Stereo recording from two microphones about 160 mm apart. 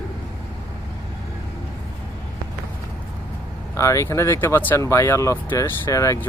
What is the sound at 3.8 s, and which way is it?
Speech, 20° left (ahead or behind).